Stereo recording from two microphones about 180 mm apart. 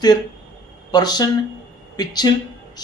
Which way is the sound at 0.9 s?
20° left (ahead or behind).